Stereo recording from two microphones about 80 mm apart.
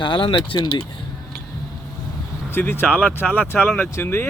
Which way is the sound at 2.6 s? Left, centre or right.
Left.